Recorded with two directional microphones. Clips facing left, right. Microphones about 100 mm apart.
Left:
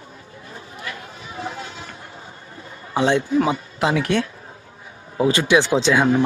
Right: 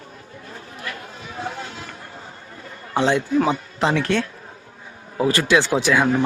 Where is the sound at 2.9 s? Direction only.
15° left (ahead or behind).